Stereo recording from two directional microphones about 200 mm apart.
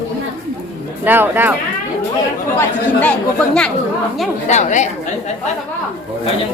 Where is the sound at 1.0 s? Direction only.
10° right (ahead or behind).